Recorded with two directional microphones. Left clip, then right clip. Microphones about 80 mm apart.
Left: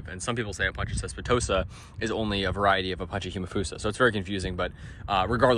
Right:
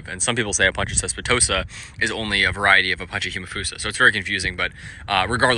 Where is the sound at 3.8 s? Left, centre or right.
Left.